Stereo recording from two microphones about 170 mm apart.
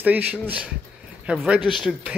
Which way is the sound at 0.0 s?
10° right (ahead or behind).